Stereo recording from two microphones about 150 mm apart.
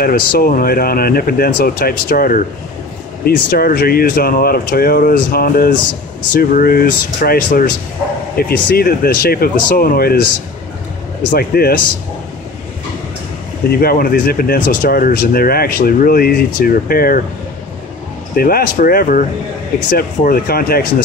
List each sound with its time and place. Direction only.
0.0 s speech: 80° left
8.4 s speech: 90° left
11.3 s speech: 90° left
13.7 s speech: 80° left
18.3 s speech: 80° left
19.9 s speech: 85° left